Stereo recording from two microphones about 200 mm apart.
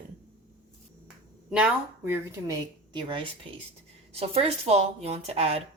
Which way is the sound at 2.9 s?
25° right (ahead or behind).